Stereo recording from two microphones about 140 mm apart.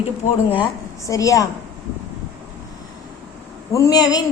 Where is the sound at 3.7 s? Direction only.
25° left (ahead or behind).